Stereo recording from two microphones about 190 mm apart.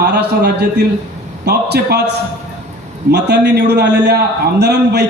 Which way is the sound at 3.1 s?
60° right (ahead or behind).